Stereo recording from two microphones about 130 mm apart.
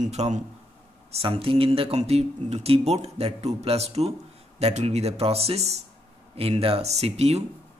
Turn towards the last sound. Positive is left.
turn(degrees=-55)  # may be behind; listen again after turning